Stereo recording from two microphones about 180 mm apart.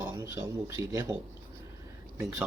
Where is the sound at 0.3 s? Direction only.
15° right (ahead or behind).